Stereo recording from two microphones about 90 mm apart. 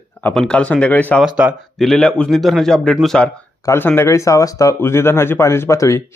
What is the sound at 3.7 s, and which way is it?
Speech, 25° left (ahead or behind).